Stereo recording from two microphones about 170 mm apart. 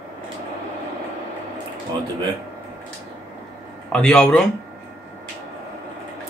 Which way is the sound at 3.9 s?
5° left (ahead or behind).